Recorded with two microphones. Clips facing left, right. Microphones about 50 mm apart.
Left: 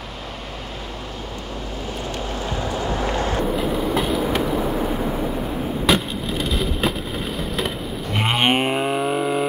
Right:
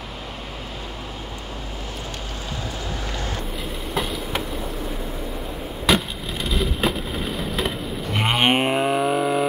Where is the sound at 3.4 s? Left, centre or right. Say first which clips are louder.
Left 9 dB; centre.